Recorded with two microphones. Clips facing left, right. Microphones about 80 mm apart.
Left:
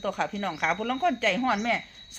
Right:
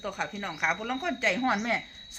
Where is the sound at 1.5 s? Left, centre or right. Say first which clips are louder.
Left 2 dB; right.